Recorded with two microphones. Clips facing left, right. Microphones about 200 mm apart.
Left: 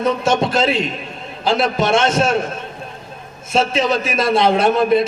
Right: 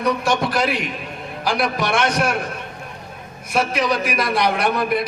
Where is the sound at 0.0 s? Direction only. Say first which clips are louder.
Left 3 dB; 25° left (ahead or behind).